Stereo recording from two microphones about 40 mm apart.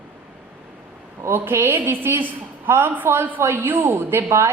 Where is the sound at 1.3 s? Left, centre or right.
Right.